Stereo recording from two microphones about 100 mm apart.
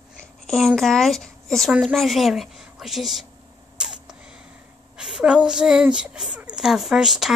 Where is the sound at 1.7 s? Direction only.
10° right (ahead or behind).